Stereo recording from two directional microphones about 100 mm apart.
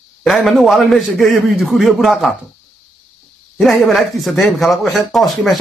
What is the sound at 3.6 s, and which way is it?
Speech, centre (ahead or behind).